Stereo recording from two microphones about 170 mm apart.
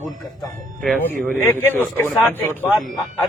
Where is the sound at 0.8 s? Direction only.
10° left (ahead or behind).